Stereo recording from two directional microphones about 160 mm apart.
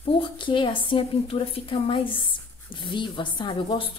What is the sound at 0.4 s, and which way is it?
A woman's voice, 30° left (ahead or behind).